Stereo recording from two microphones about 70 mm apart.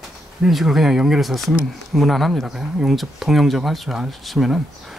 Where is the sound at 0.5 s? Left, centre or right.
Centre.